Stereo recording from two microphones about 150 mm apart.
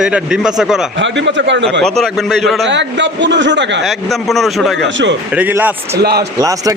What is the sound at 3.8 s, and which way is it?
Speech, centre (ahead or behind).